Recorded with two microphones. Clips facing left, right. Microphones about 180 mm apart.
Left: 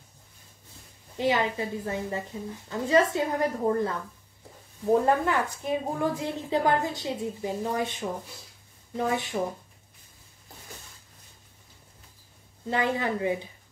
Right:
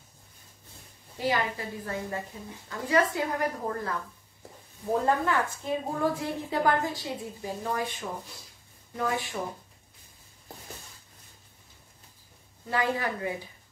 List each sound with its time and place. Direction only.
1.1 s a woman's voice: 20° left (ahead or behind)
5.0 s a woman's voice: 15° left (ahead or behind)
12.6 s a woman's voice: 25° left (ahead or behind)